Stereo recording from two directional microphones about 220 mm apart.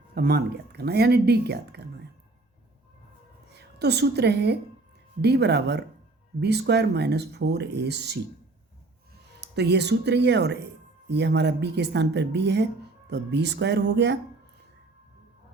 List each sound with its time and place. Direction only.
0.1 s speech: 45° right (ahead or behind)
3.6 s a woman's voice: 50° right (ahead or behind)
9.4 s speech: 50° right (ahead or behind)